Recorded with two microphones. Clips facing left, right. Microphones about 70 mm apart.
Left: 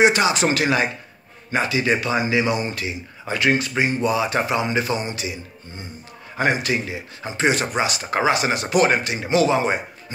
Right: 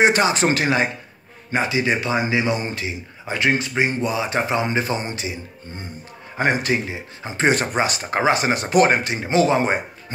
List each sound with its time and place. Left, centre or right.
0.0 s speech: right